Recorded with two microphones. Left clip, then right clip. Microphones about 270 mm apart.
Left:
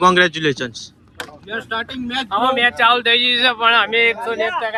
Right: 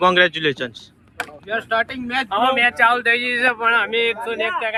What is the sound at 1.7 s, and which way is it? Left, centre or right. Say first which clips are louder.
Speech: right 3 dB; centre.